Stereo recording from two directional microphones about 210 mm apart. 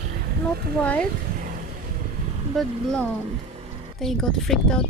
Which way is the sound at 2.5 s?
5° left (ahead or behind).